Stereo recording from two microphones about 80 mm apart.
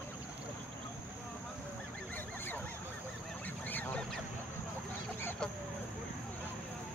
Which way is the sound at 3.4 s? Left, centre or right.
Left.